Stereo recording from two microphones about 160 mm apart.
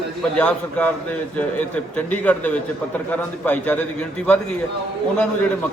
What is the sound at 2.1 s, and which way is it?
A man's voice, 10° left (ahead or behind).